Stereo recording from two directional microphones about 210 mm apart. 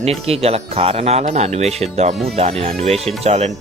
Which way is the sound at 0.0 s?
30° right (ahead or behind).